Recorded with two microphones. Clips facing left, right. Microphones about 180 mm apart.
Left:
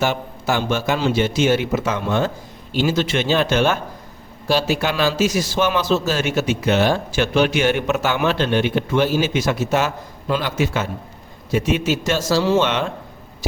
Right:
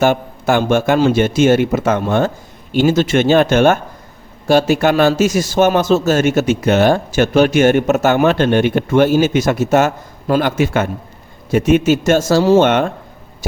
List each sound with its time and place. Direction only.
0.0 s speech: 50° right (ahead or behind)